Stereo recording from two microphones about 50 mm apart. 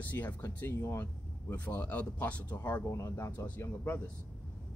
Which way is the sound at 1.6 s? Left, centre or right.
Left.